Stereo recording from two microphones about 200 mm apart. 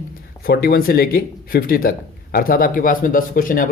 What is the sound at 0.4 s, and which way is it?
Speech, 50° left (ahead or behind).